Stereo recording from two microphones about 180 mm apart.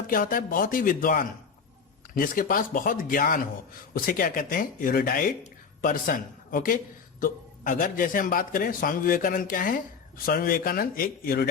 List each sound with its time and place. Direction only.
0.1 s speech: 50° left (ahead or behind)